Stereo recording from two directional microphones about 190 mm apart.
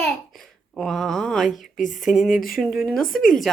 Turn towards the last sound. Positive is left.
turn(degrees=45)  # may be behind; listen again after turning